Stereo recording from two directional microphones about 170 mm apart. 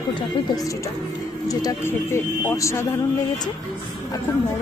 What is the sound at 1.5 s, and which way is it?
A woman's voice, 20° left (ahead or behind).